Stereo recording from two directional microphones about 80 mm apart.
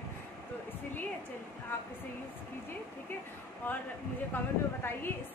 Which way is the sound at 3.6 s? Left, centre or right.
Left.